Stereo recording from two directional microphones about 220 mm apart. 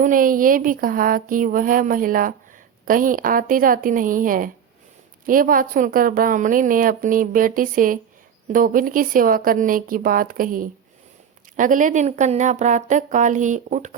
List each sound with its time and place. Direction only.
0.0 s a woman's voice: 40° right (ahead or behind)